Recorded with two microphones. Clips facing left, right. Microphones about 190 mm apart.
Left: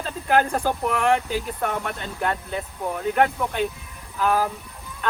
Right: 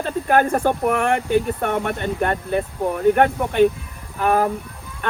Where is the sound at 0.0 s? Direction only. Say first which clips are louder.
Right 3 dB; 50° right (ahead or behind).